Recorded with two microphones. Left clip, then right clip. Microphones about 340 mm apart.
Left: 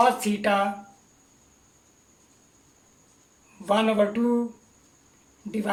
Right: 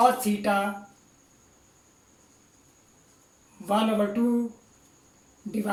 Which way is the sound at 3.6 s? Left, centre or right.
Left.